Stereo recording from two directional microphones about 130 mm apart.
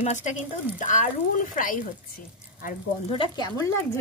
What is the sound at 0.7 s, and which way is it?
Speech, 90° left.